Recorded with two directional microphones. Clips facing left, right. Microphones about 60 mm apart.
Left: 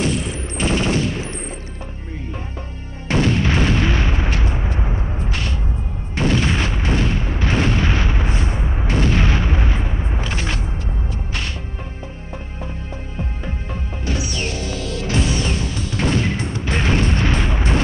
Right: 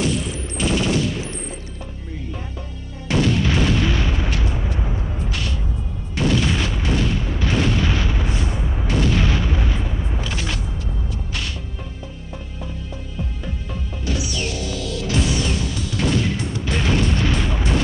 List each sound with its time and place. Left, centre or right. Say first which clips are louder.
0.0 s fusillade: left 1 dB; left
3.1 s artillery fire: left 1 dB; left
6.1 s boom: left 1 dB; left
13.2 s music: left 1 dB; left